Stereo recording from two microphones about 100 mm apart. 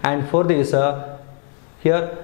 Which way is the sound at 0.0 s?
10° left (ahead or behind).